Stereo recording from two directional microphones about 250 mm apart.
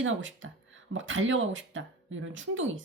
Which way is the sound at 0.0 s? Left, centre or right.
Right.